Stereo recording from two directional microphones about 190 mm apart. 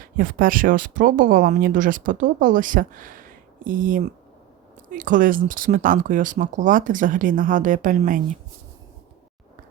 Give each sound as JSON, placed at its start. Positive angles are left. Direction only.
{"t": 0.0, "sound": "speech", "side_deg": -45}